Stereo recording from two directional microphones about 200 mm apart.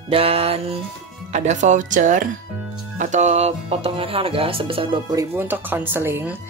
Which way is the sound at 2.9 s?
35° right (ahead or behind).